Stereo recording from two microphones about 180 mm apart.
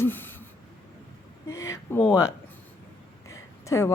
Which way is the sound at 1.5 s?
15° left (ahead or behind).